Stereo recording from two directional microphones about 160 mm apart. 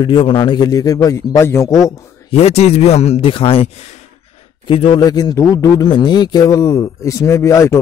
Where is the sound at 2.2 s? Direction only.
40° left (ahead or behind).